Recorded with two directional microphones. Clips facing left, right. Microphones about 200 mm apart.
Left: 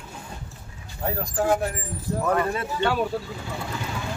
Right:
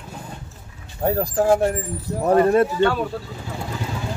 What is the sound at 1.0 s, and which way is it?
Speech, 40° right (ahead or behind).